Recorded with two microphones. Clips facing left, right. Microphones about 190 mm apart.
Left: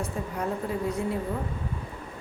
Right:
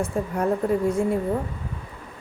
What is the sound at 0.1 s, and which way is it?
Speech, 55° right (ahead or behind).